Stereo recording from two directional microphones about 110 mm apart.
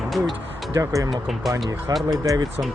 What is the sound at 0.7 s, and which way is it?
Speech, 30° right (ahead or behind).